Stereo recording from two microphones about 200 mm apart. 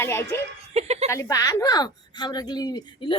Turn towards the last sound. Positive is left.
turn(degrees=20)  # may be behind; listen again after turning